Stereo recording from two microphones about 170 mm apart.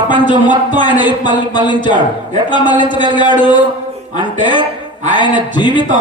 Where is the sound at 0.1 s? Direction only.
25° left (ahead or behind).